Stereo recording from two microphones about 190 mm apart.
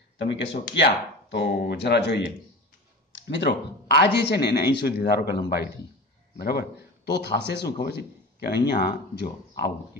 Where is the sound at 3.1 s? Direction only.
70° left (ahead or behind).